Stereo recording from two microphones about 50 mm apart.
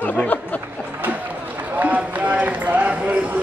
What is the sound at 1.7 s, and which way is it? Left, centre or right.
Run, right.